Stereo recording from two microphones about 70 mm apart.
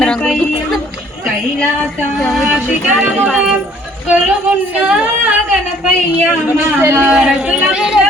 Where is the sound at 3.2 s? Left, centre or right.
Centre.